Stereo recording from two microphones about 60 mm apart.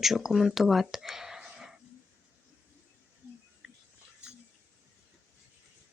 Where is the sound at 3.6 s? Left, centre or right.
Centre.